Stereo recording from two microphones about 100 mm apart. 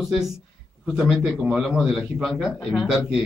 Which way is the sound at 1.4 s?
5° right (ahead or behind).